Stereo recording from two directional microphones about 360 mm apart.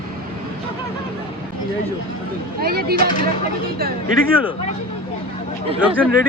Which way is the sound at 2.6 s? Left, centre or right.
Right.